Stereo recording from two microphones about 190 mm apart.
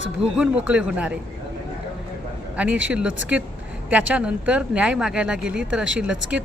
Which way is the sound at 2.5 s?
5° right (ahead or behind).